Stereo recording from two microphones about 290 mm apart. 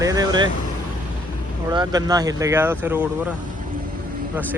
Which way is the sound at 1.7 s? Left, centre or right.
Centre.